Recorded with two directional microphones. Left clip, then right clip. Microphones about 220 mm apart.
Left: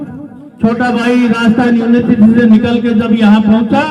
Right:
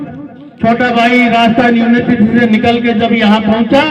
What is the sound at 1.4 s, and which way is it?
A man's voice, 30° right (ahead or behind).